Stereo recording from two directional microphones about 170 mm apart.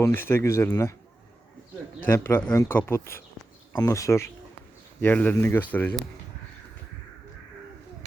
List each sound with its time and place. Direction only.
0.0 s speech: 15° left (ahead or behind)
2.0 s speech: 15° left (ahead or behind)